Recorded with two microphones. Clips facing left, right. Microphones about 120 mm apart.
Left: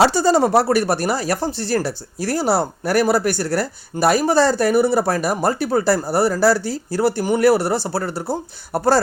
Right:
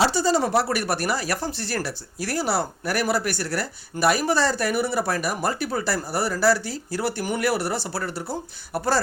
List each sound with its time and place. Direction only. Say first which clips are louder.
0.0 s speech: left 6 dB; 45° left (ahead or behind)